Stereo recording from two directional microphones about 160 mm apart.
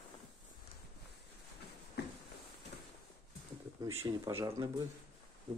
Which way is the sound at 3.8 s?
20° right (ahead or behind).